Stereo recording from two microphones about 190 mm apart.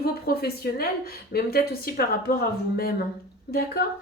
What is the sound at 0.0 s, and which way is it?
A woman's voice, 55° left (ahead or behind).